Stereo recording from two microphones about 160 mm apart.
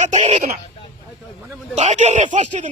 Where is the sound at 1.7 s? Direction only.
45° right (ahead or behind).